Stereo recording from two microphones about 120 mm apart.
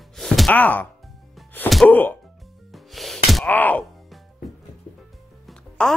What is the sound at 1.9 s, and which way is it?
Speech, 15° left (ahead or behind).